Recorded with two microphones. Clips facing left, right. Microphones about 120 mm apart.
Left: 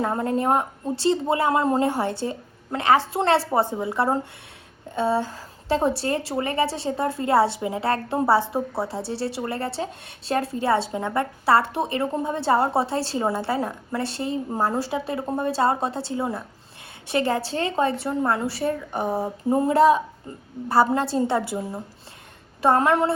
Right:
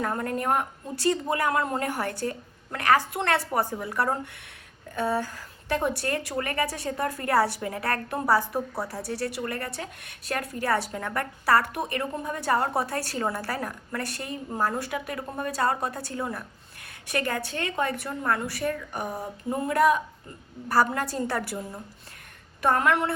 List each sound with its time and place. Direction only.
0.0 s a woman's voice: 25° left (ahead or behind)